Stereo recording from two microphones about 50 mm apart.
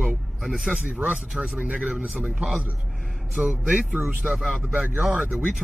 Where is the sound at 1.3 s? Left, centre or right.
Centre.